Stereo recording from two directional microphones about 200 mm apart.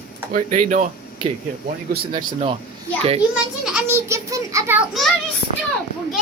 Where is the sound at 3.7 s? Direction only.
15° right (ahead or behind).